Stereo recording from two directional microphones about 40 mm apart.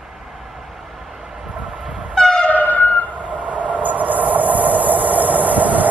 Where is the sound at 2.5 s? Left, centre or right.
Left.